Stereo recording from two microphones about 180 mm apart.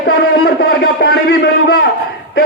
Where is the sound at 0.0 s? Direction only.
60° left (ahead or behind).